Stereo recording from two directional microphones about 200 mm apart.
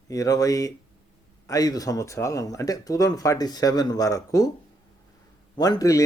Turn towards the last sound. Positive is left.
turn(degrees=15)  # may be behind; listen again after turning